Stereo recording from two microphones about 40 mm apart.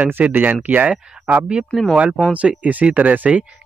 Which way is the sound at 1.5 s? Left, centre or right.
Right.